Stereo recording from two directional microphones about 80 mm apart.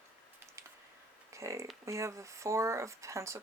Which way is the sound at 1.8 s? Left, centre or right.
Right.